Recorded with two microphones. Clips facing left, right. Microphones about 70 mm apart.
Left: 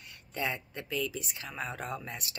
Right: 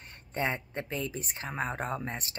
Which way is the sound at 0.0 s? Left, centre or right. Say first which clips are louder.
Right 3 dB; right.